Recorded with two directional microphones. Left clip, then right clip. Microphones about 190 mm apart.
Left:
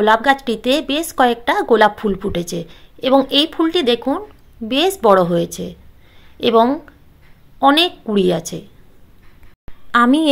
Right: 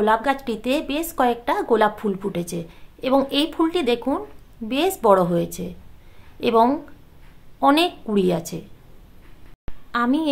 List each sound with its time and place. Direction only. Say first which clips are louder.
0.0 s a woman's voice: left 6 dB; 25° left (ahead or behind)
9.8 s a woman's voice: left 8 dB; 40° left (ahead or behind)